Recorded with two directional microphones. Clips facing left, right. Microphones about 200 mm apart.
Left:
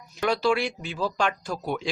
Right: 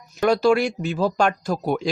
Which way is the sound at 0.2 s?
45° right (ahead or behind).